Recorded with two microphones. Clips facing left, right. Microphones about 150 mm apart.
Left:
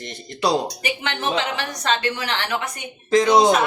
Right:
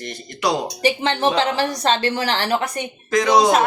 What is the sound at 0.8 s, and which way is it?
Speech, 30° right (ahead or behind).